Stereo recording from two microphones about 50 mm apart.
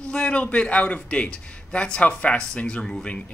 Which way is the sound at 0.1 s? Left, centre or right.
Left.